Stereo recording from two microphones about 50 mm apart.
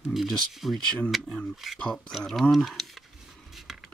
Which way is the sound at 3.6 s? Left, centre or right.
Centre.